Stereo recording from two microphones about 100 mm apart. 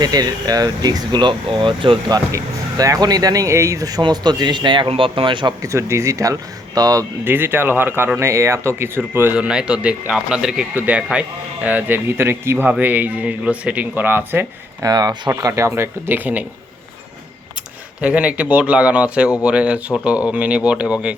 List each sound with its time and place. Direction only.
0.0 s speech: 40° right (ahead or behind); by 2.1 s 55° right (ahead or behind)
2.1 s speech: 35° right (ahead or behind); by 5.5 s 55° right (ahead or behind)
5.6 s speech: 30° right (ahead or behind)
7.3 s speech: 20° right (ahead or behind)
9.3 s speech: 10° right (ahead or behind)
14.8 s speech: 40° right (ahead or behind); by 16.4 s 20° right (ahead or behind)
18.0 s speech: 15° right (ahead or behind)